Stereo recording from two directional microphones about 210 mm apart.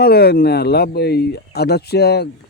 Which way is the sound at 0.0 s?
50° left (ahead or behind).